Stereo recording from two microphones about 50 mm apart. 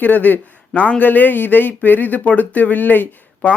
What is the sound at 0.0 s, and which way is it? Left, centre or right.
Speech, left.